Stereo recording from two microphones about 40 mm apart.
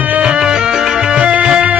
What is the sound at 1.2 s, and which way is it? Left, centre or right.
Music, right.